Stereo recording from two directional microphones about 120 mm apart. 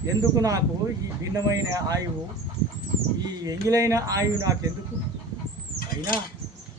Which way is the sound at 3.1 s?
35° right (ahead or behind).